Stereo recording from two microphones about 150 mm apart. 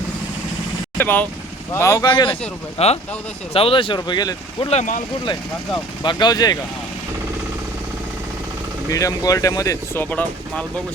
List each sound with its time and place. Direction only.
0.9 s speech: 10° left (ahead or behind)
2.0 s speech: 35° left (ahead or behind)
2.7 s speech: 45° left (ahead or behind); by 4.7 s 30° left (ahead or behind)
4.7 s speech: 55° left (ahead or behind)
6.0 s speech: 30° left (ahead or behind)
8.9 s speech: 20° left (ahead or behind)